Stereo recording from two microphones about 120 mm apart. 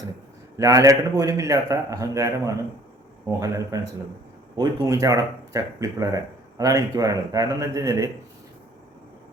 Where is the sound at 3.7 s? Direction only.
30° right (ahead or behind).